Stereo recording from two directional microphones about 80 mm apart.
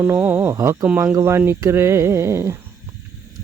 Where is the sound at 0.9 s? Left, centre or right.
Centre.